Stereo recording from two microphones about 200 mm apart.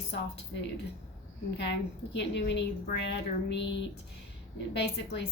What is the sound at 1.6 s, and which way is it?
A woman's voice, 60° left (ahead or behind).